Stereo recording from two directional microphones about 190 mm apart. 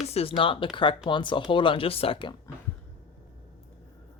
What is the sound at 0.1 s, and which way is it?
Speech, 30° left (ahead or behind).